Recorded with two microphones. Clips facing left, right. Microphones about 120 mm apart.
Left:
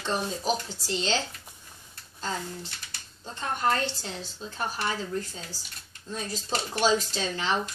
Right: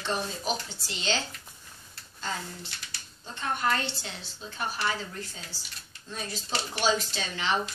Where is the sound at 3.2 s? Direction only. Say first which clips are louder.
Left 2 dB; 35° left (ahead or behind).